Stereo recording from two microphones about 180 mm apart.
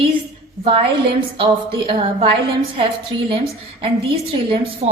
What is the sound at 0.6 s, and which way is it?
A woman's voice, 30° right (ahead or behind).